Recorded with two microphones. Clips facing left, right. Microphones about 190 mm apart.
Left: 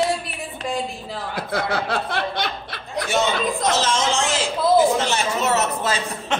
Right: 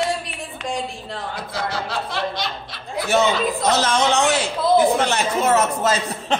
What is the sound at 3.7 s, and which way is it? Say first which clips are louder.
A man's voice: right 5 dB; 60° right (ahead or behind).